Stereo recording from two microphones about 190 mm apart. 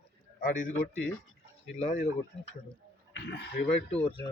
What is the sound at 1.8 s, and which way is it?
Speech, 40° left (ahead or behind).